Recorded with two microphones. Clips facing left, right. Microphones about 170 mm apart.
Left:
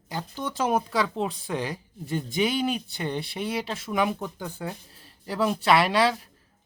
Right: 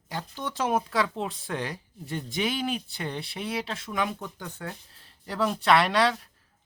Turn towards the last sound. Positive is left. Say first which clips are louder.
# left 1 dB
turn(degrees=5)  # may be behind; listen again after turning